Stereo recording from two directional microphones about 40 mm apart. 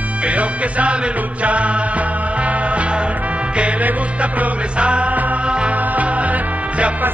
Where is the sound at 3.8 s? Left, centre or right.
Right.